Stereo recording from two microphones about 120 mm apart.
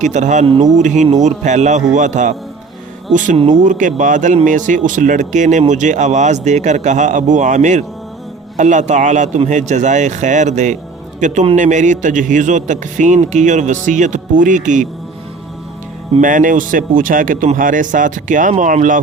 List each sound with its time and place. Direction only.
0.0 s speech: 90° right
1.1 s speech: 75° right (ahead or behind)
16.2 s speech: 90° right